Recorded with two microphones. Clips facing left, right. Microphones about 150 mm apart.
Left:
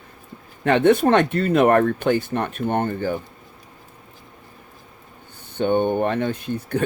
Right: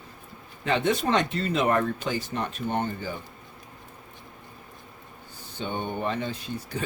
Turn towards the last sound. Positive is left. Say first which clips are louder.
# left 9 dB
turn(degrees=60)  # may be behind; listen again after turning